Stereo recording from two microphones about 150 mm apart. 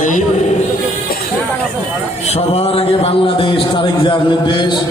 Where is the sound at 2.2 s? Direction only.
45° left (ahead or behind).